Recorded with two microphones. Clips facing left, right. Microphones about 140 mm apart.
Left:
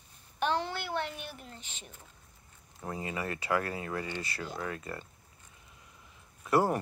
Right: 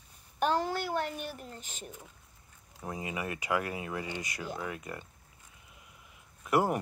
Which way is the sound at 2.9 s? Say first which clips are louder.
Left 1 dB; 15° right (ahead or behind).